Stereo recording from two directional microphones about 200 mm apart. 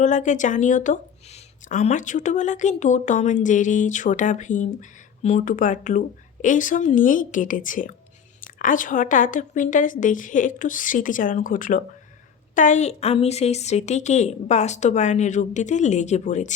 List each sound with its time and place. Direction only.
0.0 s speech: 40° left (ahead or behind)